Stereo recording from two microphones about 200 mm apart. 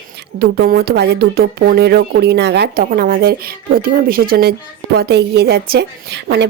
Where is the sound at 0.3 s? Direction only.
50° right (ahead or behind).